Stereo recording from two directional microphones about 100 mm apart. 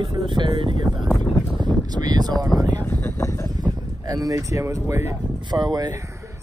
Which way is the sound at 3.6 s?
40° right (ahead or behind).